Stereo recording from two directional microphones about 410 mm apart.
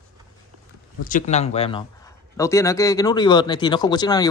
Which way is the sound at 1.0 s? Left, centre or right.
Centre.